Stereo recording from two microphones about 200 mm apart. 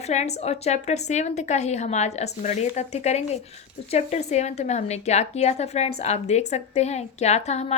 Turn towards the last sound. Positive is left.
turn(degrees=35)  # may be behind; listen again after turning